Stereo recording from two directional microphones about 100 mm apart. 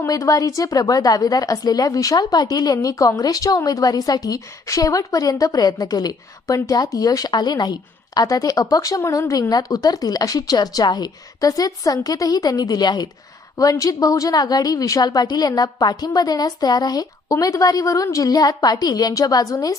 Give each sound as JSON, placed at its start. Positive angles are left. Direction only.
{"t": 0.1, "sound": "a woman's voice", "side_deg": 35}